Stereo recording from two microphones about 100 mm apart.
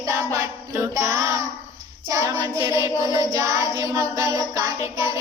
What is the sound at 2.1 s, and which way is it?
Child singing, 30° right (ahead or behind).